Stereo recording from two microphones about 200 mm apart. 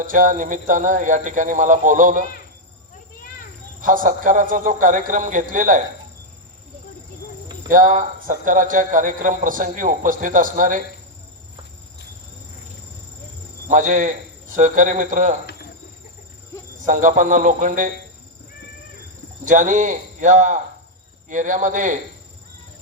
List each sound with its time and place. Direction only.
0.0 s a man's voice: 40° right (ahead or behind)
3.8 s a man's voice: 40° right (ahead or behind)
7.7 s a man's voice: 40° right (ahead or behind)
13.7 s a man's voice: 40° right (ahead or behind)
16.8 s a man's voice: 40° right (ahead or behind)
19.5 s a man's voice: 40° right (ahead or behind)